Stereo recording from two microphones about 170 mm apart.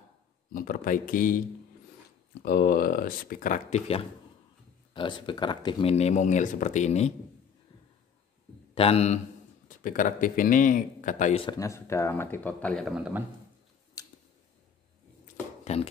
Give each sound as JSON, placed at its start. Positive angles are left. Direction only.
{"t": 0.5, "sound": "speech", "side_deg": 55}
{"t": 2.4, "sound": "speech", "side_deg": 65}
{"t": 4.9, "sound": "speech", "side_deg": 30}
{"t": 8.7, "sound": "speech", "side_deg": 35}
{"t": 9.8, "sound": "speech", "side_deg": 50}
{"t": 11.3, "sound": "speech", "side_deg": 25}
{"t": 12.9, "sound": "a man's voice", "side_deg": -5}
{"t": 14.0, "sound": "a sound", "side_deg": 20}
{"t": 15.6, "sound": "speech", "side_deg": 40}